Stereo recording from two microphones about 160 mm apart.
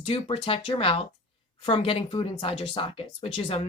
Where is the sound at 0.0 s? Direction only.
35° left (ahead or behind).